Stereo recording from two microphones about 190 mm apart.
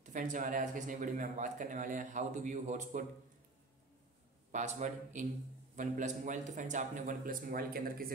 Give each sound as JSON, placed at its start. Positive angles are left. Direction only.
{"t": 0.0, "sound": "speech", "side_deg": -40}
{"t": 4.5, "sound": "speech", "side_deg": -40}